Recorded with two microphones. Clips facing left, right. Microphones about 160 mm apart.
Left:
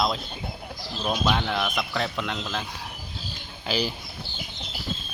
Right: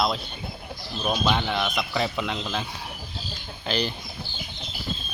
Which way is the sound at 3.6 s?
5° left (ahead or behind).